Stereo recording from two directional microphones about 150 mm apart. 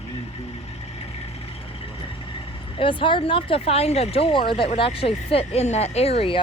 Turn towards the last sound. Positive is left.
turn(degrees=40)  # may be behind; listen again after turning